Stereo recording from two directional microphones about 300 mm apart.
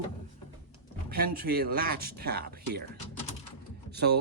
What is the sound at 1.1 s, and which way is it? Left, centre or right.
Speech, right.